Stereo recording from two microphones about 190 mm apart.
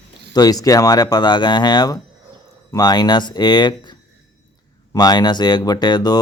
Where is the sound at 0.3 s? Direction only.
20° left (ahead or behind).